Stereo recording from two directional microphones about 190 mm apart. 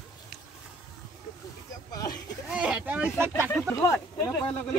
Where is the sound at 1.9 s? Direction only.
20° left (ahead or behind).